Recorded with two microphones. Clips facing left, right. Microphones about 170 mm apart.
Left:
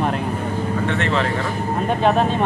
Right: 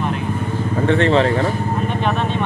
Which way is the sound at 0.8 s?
35° right (ahead or behind).